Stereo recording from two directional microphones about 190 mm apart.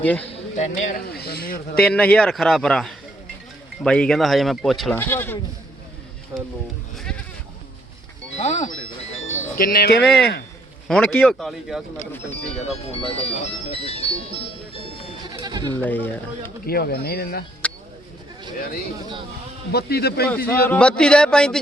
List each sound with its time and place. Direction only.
0.0 s speech: 10° left (ahead or behind)
0.5 s speech: 40° left (ahead or behind)
1.8 s speech: 5° left (ahead or behind)
6.9 s speech: 5° left (ahead or behind)
8.4 s music: 40° left (ahead or behind)
9.6 s speech: 55° left (ahead or behind)
10.8 s speech: 5° left (ahead or behind)
12.5 s speech: 35° left (ahead or behind)
15.4 s bleat: 20° right (ahead or behind)
15.8 s speech: 10° left (ahead or behind)
16.6 s speech: 55° left (ahead or behind)
17.6 s a sound: 5° left (ahead or behind)
19.7 s speech: 55° left (ahead or behind)
20.2 s speech: 10° left (ahead or behind)